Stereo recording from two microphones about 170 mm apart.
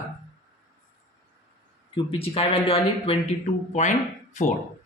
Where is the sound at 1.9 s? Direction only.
35° left (ahead or behind).